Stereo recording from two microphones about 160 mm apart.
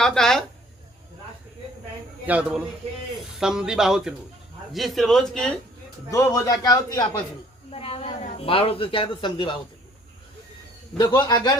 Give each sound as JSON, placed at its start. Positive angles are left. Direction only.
{"t": 0.0, "sound": "speech", "side_deg": 5}
{"t": 2.2, "sound": "a man's voice", "side_deg": -10}
{"t": 6.1, "sound": "a man's voice", "side_deg": 20}
{"t": 7.7, "sound": "a man's voice", "side_deg": 35}
{"t": 10.9, "sound": "a man's voice", "side_deg": 25}